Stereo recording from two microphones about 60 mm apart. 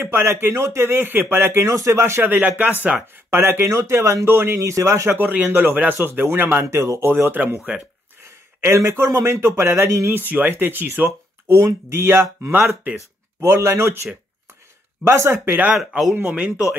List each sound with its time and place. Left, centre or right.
0.0 s speech: right
2.2 s speech: right
3.3 s speech: right
4.6 s speech: right
5.1 s speech: right
6.6 s speech: right
7.1 s speech: right
7.5 s speech: centre
8.6 s speech: right
10.1 s speech: right
11.9 s speech: right
15.0 s speech: right
16.3 s speech: right